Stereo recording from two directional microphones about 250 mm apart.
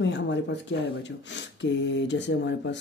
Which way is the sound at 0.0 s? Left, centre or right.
Left.